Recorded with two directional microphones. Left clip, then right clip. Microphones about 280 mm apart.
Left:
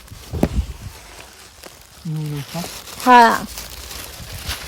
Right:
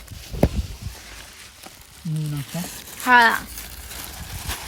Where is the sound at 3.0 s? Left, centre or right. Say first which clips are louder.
Left 5 dB; centre.